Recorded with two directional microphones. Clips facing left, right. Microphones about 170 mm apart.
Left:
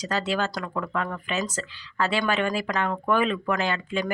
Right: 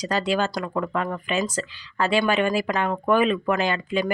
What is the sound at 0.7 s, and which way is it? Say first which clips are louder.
Speech: right 3 dB; 25° right (ahead or behind).